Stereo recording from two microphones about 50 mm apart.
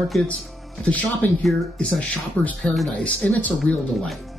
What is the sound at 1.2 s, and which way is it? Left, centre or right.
Speech, left.